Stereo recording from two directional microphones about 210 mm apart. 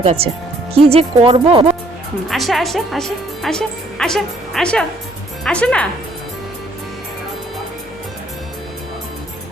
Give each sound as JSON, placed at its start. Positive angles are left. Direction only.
{"t": 0.0, "sound": "speech", "side_deg": -30}
{"t": 2.3, "sound": "a woman's voice", "side_deg": 0}